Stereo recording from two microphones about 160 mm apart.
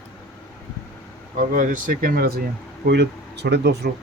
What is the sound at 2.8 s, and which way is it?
Speech, 90° right.